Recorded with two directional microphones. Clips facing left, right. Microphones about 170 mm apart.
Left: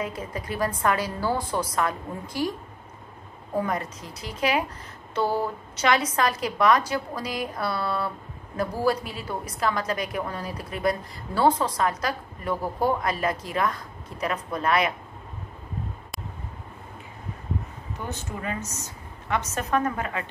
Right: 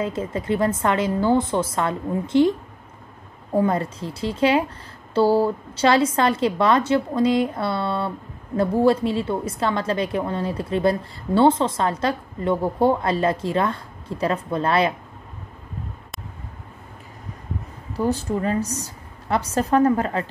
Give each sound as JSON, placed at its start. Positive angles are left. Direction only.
{"t": 0.0, "sound": "a woman's voice", "side_deg": -25}
{"t": 3.5, "sound": "a woman's voice", "side_deg": -30}
{"t": 17.9, "sound": "a woman's voice", "side_deg": -35}